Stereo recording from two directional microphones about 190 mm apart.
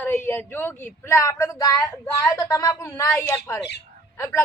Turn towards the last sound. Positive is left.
turn(degrees=15)  # may be behind; listen again after turning